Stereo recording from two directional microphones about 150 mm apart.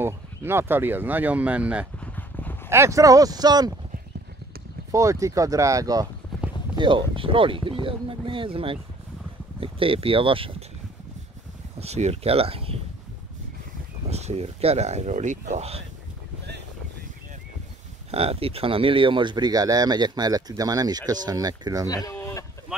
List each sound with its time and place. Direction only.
0.0 s speech: 15° right (ahead or behind)
2.0 s a sound: 10° left (ahead or behind)
2.7 s speech: 20° right (ahead or behind)
4.9 s speech: 20° right (ahead or behind)
6.3 s clip-clop: centre (ahead or behind)
6.8 s speech: 30° right (ahead or behind)
11.8 s speech: 45° right (ahead or behind)
14.0 s speech: 45° right (ahead or behind)
18.1 s speech: 40° right (ahead or behind); by 21.8 s 25° right (ahead or behind)
21.8 s a sound: 25° left (ahead or behind)
22.7 s speech: 5° right (ahead or behind)